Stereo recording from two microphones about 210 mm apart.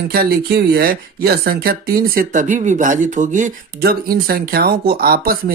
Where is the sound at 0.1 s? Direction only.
45° right (ahead or behind).